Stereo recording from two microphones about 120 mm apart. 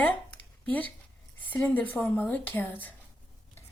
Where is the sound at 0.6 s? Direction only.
10° left (ahead or behind).